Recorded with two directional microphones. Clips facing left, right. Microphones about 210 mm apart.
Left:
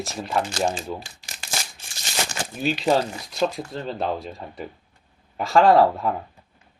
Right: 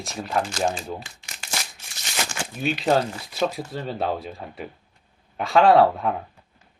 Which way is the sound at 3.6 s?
5° right (ahead or behind).